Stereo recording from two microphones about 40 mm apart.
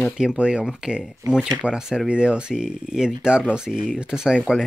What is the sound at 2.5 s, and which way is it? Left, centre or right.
Speech, centre.